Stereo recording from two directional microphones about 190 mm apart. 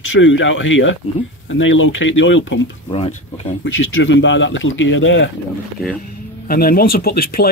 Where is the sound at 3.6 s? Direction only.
90° left.